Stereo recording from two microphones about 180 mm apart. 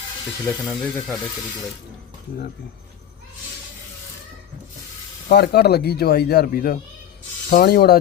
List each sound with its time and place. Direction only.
0.6 s speech: centre (ahead or behind)
5.3 s speech: 65° left (ahead or behind)